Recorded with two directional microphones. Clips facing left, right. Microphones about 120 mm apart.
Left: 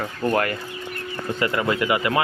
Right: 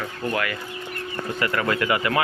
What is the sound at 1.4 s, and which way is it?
Speech, 20° left (ahead or behind).